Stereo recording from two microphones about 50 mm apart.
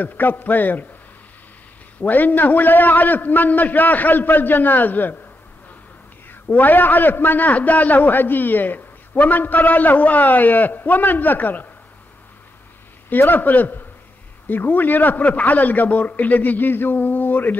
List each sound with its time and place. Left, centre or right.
0.0 s a man's voice: left
2.0 s a man's voice: left
6.4 s a man's voice: left
13.1 s a man's voice: left